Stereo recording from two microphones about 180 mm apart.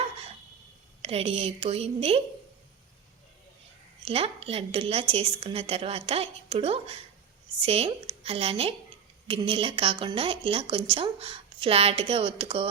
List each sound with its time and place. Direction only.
1.0 s a woman's voice: 35° right (ahead or behind)
4.0 s a woman's voice: 35° right (ahead or behind)